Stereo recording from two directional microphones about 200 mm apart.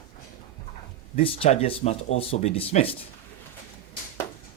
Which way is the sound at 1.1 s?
30° left (ahead or behind).